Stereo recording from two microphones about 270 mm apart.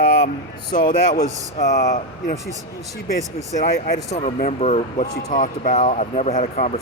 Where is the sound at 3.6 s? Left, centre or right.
Left.